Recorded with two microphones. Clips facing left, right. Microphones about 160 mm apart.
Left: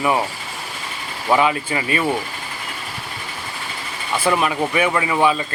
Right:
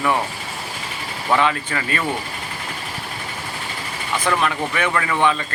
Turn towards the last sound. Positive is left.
turn(degrees=15)  # may be behind; listen again after turning